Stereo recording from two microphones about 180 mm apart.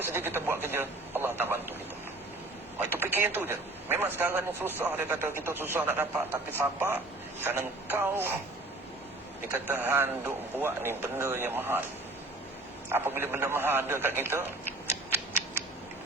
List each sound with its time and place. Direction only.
0.0 s a man's voice: 10° right (ahead or behind)
2.9 s a man's voice: 10° right (ahead or behind)
9.5 s a man's voice: 10° right (ahead or behind)
12.9 s a man's voice: 10° right (ahead or behind)